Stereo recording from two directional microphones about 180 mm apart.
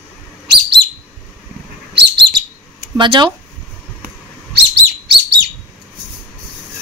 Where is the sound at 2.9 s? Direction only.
25° right (ahead or behind).